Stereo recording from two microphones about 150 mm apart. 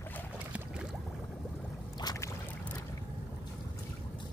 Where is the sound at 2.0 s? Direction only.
25° left (ahead or behind).